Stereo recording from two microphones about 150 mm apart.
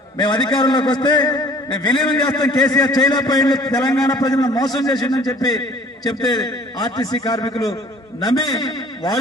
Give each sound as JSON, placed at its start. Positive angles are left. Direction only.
{"t": 0.2, "sound": "a man's voice", "side_deg": 30}